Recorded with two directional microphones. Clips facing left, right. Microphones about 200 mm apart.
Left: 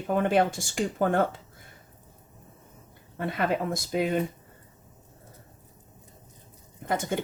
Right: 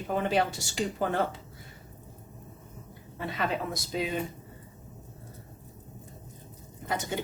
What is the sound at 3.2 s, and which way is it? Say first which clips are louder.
Speech: left 4 dB; 50° left (ahead or behind).